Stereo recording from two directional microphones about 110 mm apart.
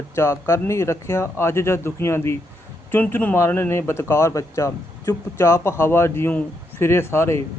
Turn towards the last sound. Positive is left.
turn(degrees=25)  # may be behind; listen again after turning